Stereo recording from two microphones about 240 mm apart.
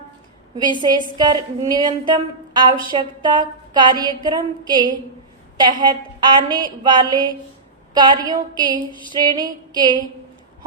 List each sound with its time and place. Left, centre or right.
0.8 s a woman's voice: centre